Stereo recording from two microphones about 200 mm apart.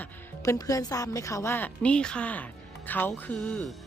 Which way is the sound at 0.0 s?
15° left (ahead or behind).